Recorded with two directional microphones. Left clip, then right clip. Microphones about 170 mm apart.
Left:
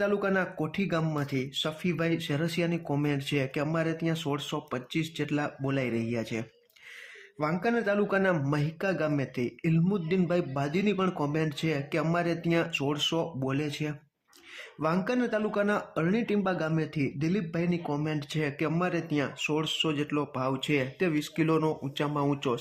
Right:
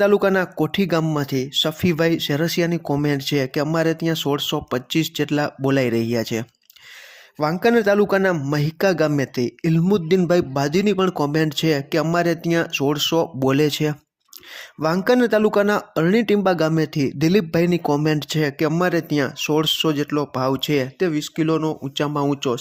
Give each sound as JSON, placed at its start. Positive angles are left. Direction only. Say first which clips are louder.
{"t": 0.0, "sound": "speech", "louder": "right 11 dB", "side_deg": -50}
{"t": 14.8, "sound": "speech", "louder": "right 11 dB", "side_deg": -40}